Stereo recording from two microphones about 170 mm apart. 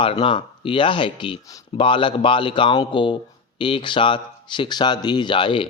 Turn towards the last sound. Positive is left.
turn(degrees=30)  # may be behind; listen again after turning